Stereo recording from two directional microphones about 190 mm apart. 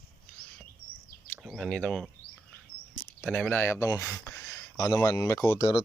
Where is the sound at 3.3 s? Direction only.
10° left (ahead or behind).